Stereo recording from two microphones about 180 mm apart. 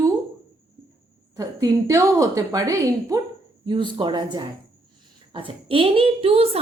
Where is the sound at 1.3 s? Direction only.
20° right (ahead or behind).